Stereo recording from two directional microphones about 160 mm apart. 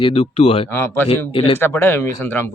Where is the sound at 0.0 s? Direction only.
40° left (ahead or behind).